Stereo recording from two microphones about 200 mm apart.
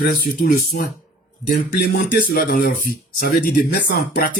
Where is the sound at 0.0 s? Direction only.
40° left (ahead or behind).